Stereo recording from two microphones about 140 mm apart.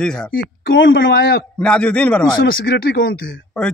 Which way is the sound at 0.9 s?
90° left.